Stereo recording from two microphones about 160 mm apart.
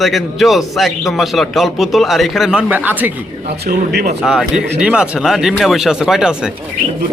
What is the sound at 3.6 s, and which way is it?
Speech, 75° right (ahead or behind).